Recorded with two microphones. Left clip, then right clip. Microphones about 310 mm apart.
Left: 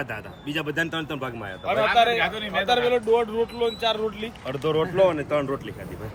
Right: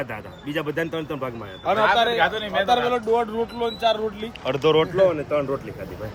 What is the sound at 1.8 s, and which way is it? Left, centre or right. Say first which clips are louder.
A man's voice: right 1 dB; centre.